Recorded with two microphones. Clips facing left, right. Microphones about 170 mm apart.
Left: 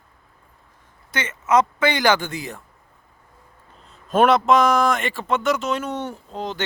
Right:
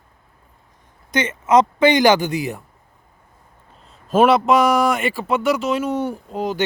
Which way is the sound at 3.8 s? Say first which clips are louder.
Right 2 dB; 5° right (ahead or behind).